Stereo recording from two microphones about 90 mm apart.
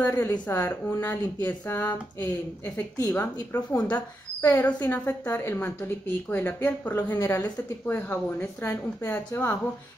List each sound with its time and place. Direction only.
0.0 s speech: 25° left (ahead or behind)